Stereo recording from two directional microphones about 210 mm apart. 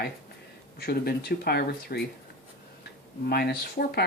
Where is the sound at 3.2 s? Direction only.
50° left (ahead or behind).